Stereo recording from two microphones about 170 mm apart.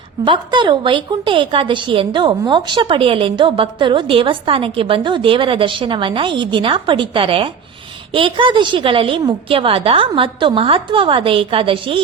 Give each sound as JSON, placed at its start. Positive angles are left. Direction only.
{"t": 0.3, "sound": "a woman's voice", "side_deg": -30}